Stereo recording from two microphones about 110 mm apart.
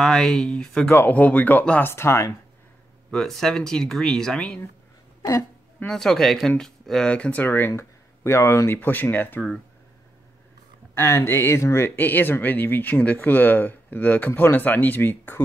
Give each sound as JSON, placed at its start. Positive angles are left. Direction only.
{"t": 0.0, "sound": "speech", "side_deg": 5}
{"t": 0.8, "sound": "speech", "side_deg": 20}
{"t": 3.1, "sound": "speech", "side_deg": 5}
{"t": 5.9, "sound": "speech", "side_deg": 5}
{"t": 11.0, "sound": "speech", "side_deg": 20}